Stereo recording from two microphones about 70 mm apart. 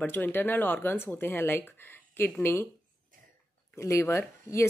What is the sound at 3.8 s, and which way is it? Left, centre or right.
Speech, left.